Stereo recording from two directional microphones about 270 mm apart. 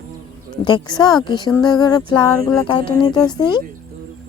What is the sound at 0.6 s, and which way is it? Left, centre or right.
Speech, centre.